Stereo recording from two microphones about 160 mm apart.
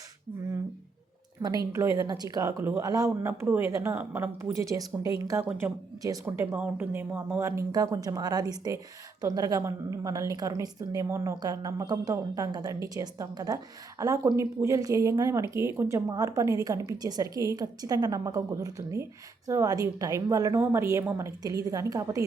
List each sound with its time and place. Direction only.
1.4 s speech: 25° right (ahead or behind)
5.5 s speech: 10° right (ahead or behind)